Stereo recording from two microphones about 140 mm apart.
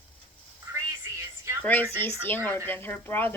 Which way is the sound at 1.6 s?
15° left (ahead or behind).